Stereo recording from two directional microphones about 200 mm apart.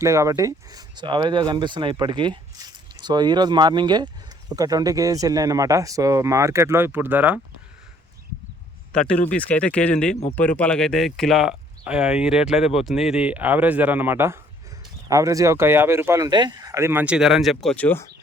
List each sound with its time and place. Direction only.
0.0 s speech: 15° right (ahead or behind)
8.9 s speech: 5° left (ahead or behind)